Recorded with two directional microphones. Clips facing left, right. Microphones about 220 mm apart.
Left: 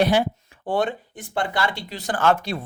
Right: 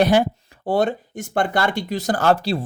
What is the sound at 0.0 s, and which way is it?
Speech, 45° right (ahead or behind).